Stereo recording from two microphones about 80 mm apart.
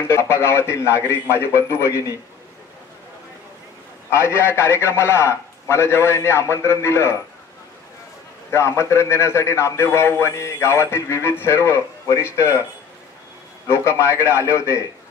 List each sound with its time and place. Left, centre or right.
0.1 s a man's voice: left
4.1 s a man's voice: left
8.5 s a man's voice: left
13.7 s a man's voice: left